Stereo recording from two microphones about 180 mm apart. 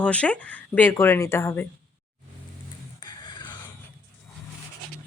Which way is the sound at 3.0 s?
25° left (ahead or behind).